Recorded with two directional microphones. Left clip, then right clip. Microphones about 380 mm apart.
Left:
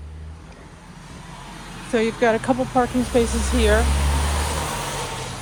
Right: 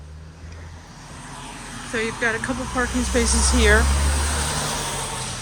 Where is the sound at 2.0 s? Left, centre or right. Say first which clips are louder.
Left 4 dB; centre.